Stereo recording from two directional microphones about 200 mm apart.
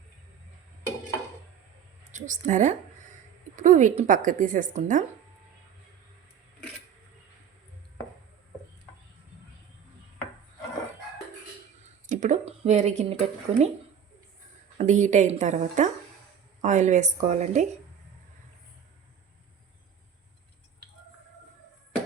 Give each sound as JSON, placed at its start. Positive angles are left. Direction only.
{"t": 2.1, "sound": "speech", "side_deg": -40}
{"t": 12.0, "sound": "a sound", "side_deg": -40}
{"t": 14.8, "sound": "speech", "side_deg": -35}